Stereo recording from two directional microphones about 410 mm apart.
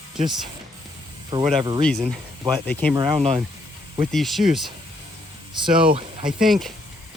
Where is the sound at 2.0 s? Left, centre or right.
Centre.